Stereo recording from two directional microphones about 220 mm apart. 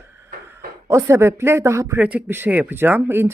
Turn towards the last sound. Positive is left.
turn(degrees=-10)  # may be behind; listen again after turning